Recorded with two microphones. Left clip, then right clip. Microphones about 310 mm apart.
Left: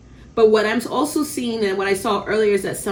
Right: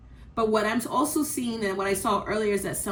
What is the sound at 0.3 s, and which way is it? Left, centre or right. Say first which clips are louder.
Speech: left 9 dB; centre.